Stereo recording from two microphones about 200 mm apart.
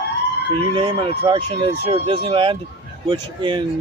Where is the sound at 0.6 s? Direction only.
25° right (ahead or behind).